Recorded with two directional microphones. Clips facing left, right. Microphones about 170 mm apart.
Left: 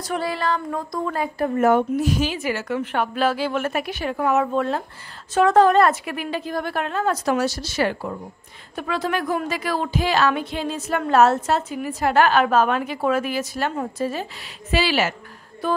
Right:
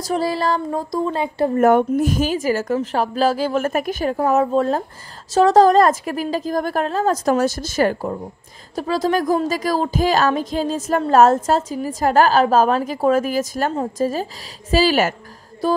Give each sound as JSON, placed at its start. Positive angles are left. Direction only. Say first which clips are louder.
{"t": 0.1, "sound": "a woman's voice", "louder": "right 4 dB", "side_deg": -35}
{"t": 1.6, "sound": "a woman's voice", "louder": "right 3 dB", "side_deg": -50}